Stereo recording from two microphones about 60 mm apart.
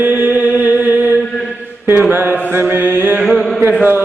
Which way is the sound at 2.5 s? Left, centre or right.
Right.